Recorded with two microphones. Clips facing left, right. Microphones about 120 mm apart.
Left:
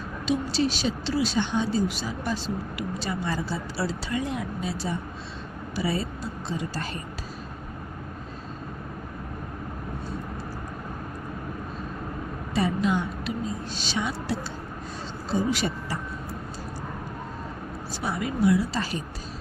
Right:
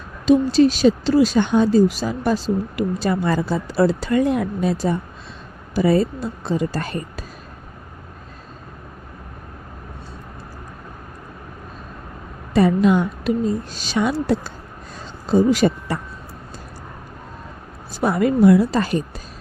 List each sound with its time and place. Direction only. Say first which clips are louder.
0.3 s speech: right 11 dB; 50° right (ahead or behind)
12.5 s a woman's voice: right 9 dB; 60° right (ahead or behind)
18.0 s speech: right 10 dB; 55° right (ahead or behind)